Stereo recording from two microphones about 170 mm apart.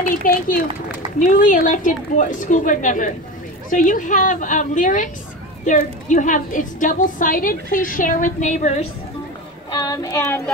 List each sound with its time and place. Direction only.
0.1 s a child's voice: 55° left (ahead or behind)
9.7 s child singing: 25° left (ahead or behind)